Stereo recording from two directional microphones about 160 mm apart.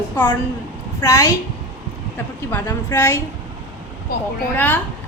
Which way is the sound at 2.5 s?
15° left (ahead or behind).